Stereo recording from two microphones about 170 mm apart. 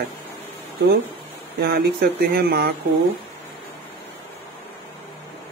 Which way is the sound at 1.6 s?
65° right (ahead or behind).